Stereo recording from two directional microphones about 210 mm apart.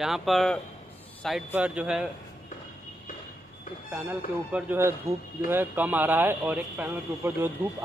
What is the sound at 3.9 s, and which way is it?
Speech, 5° right (ahead or behind).